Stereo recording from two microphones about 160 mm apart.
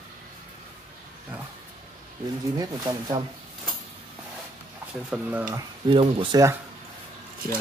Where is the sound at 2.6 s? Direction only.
25° right (ahead or behind).